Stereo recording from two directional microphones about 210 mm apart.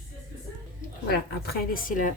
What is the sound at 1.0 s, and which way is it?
A woman's voice, 45° left (ahead or behind).